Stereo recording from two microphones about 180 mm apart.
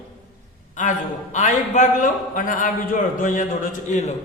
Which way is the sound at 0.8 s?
45° left (ahead or behind).